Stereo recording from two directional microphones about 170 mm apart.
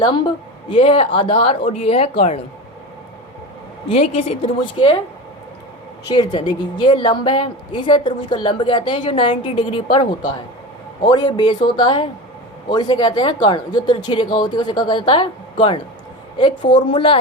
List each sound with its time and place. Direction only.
0.7 s speech: 35° left (ahead or behind)
3.8 s speech: 35° left (ahead or behind)
6.1 s a woman's voice: 25° left (ahead or behind)